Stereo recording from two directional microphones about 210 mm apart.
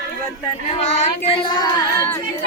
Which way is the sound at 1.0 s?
25° left (ahead or behind).